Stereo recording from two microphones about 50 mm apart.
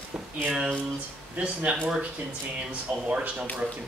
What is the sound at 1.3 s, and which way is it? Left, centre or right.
Speech, right.